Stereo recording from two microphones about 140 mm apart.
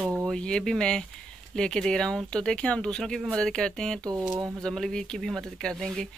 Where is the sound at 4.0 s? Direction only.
25° right (ahead or behind).